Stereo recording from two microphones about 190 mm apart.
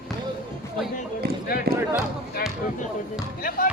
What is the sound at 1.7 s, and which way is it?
Speech, 55° right (ahead or behind).